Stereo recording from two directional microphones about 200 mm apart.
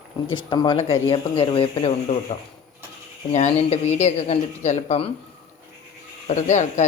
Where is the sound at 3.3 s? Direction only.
35° left (ahead or behind).